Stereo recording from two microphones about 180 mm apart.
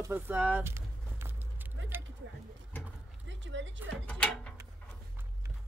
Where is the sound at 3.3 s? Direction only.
90° right.